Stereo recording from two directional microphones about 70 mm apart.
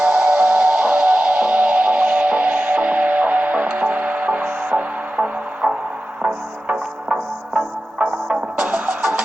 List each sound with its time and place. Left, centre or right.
0.1 s music: centre